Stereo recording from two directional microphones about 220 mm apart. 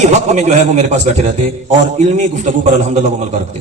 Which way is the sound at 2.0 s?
30° right (ahead or behind).